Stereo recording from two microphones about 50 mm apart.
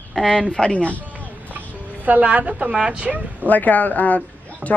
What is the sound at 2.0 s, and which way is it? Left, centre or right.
Speech, right.